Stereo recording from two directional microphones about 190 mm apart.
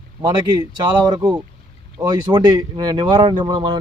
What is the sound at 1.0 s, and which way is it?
Speech, 20° right (ahead or behind).